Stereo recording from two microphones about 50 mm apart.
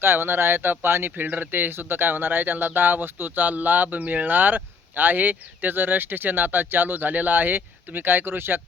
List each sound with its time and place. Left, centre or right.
0.0 s speech: right
1.1 s speech: right